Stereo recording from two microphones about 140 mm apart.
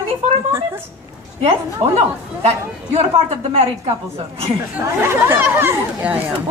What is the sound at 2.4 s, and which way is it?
A woman's voice, 45° right (ahead or behind).